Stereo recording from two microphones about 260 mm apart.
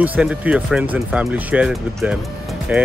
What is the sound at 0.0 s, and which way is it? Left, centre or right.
Speech, centre.